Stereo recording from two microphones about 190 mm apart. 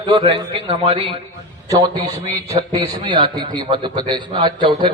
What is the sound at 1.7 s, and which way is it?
A man's voice, 20° right (ahead or behind).